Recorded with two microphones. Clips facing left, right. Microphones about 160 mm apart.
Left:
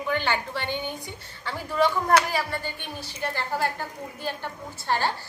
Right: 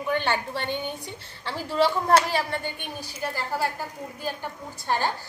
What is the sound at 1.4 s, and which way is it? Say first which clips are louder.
A woman's voice: right 1 dB; 30° right (ahead or behind).